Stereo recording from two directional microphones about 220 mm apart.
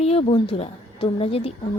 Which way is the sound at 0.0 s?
25° left (ahead or behind).